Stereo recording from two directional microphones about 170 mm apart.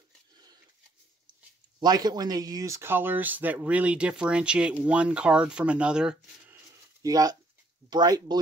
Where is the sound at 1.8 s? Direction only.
25° right (ahead or behind); by 6.5 s 5° right (ahead or behind).